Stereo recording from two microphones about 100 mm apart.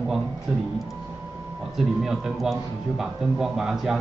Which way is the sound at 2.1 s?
Centre (ahead or behind).